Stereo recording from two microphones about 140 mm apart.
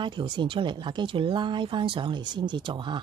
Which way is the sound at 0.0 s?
35° right (ahead or behind).